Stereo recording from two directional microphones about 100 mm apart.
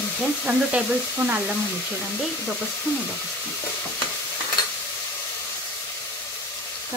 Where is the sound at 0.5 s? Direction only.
15° right (ahead or behind).